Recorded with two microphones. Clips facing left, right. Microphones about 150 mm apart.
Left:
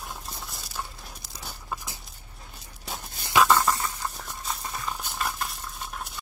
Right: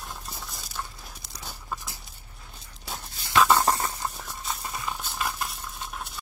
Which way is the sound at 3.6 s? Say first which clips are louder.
Right 2 dB; 45° right (ahead or behind).